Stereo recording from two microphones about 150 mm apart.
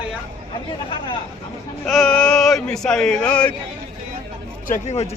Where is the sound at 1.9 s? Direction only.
5° left (ahead or behind).